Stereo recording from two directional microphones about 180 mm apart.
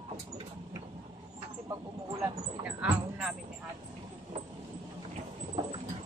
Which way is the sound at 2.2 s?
15° right (ahead or behind).